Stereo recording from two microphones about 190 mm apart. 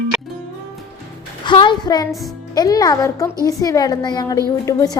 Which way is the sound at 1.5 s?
25° left (ahead or behind).